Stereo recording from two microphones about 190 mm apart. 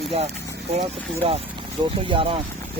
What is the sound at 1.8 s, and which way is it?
Speech, 25° right (ahead or behind).